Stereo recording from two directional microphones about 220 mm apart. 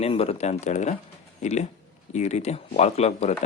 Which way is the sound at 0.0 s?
25° left (ahead or behind).